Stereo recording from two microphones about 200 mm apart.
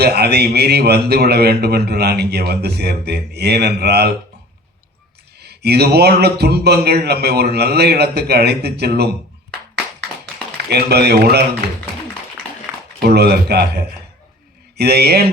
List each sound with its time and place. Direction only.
0.0 s a man's voice: 55° right (ahead or behind)
5.4 s a man's voice: 55° right (ahead or behind)
10.7 s a man's voice: 55° right (ahead or behind)
13.0 s a man's voice: 55° right (ahead or behind)